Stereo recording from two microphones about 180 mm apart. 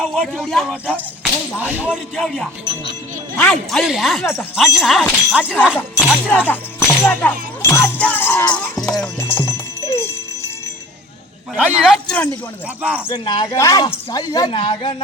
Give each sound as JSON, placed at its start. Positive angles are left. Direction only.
{"t": 0.0, "sound": "speech", "side_deg": 0}
{"t": 0.9, "sound": "whip", "side_deg": 10}
{"t": 1.6, "sound": "music", "side_deg": -10}
{"t": 2.1, "sound": "speech", "side_deg": 0}
{"t": 6.5, "sound": "music", "side_deg": 10}
{"t": 9.1, "sound": "music", "side_deg": 10}
{"t": 11.8, "sound": "speech", "side_deg": 0}
{"t": 13.1, "sound": "speech", "side_deg": 25}